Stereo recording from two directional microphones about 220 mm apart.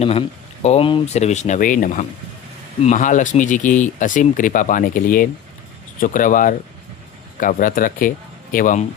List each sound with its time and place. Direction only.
0.0 s speech: 25° left (ahead or behind)